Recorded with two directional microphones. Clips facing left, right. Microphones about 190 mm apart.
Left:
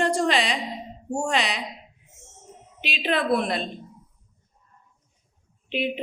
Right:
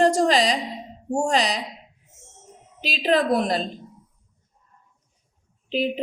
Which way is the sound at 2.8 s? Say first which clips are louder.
Right 5 dB; 35° right (ahead or behind).